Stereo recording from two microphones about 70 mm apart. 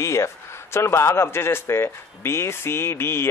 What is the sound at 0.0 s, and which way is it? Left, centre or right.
A man's voice, left.